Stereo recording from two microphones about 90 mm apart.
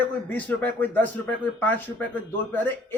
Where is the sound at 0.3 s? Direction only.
15° left (ahead or behind).